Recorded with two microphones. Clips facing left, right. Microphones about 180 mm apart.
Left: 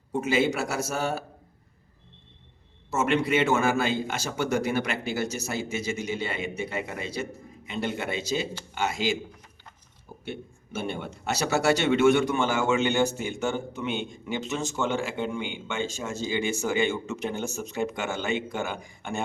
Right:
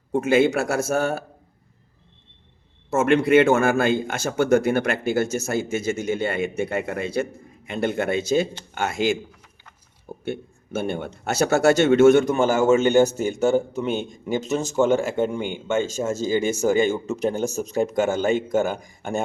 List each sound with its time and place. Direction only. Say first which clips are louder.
0.1 s speech: right 6 dB; 55° right (ahead or behind)
2.9 s speech: right 8 dB; 50° right (ahead or behind)
10.2 s speech: right 7 dB; 50° right (ahead or behind)